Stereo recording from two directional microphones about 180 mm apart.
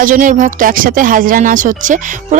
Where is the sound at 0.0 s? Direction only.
45° right (ahead or behind).